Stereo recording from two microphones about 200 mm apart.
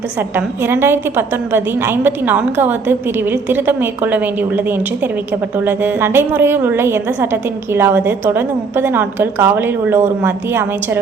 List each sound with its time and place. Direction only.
0.3 s a woman's voice: 10° right (ahead or behind)
5.6 s a woman's voice: 10° right (ahead or behind)